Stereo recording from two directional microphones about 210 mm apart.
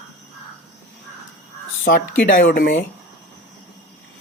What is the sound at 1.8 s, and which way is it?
Speech, 40° left (ahead or behind).